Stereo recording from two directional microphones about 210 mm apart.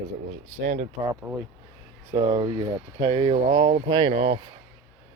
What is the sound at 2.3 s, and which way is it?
Speech, 20° right (ahead or behind).